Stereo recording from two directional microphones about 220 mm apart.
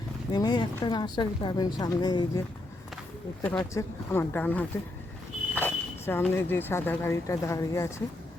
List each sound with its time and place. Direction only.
0.3 s a woman's voice: 20° left (ahead or behind)
3.4 s speech: 5° left (ahead or behind)